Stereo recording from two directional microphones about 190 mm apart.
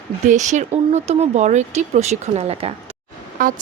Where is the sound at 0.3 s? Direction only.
40° right (ahead or behind).